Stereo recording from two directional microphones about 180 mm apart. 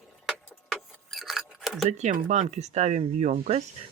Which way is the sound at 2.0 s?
45° right (ahead or behind).